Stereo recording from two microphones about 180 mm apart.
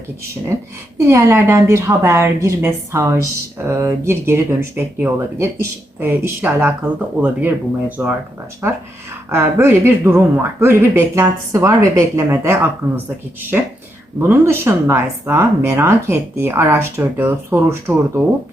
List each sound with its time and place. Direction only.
0.9 s speech: 15° right (ahead or behind)